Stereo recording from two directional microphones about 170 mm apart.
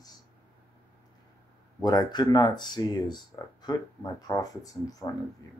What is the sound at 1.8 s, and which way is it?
Speech, 25° left (ahead or behind).